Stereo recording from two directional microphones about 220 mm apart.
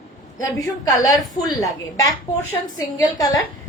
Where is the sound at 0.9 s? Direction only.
15° left (ahead or behind).